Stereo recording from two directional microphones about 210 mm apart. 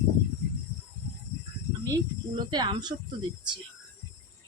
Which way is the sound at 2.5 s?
20° right (ahead or behind).